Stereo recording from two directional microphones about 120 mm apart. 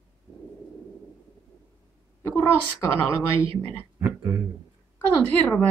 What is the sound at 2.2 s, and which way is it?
Speech, 15° left (ahead or behind).